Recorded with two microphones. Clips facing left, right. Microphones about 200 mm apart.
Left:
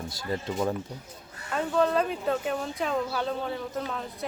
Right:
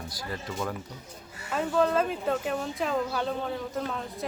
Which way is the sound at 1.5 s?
Centre (ahead or behind).